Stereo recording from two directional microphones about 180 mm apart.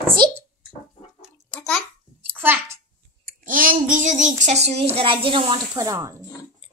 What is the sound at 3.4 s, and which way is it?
A child's voice, 50° right (ahead or behind).